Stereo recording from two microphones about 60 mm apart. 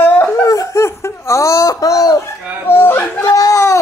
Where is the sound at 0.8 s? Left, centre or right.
Left.